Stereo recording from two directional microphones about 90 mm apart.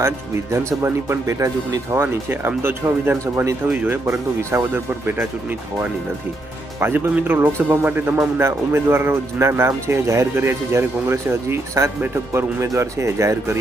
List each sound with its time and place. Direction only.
0.5 s speech: 30° right (ahead or behind)
6.7 s speech: 25° right (ahead or behind)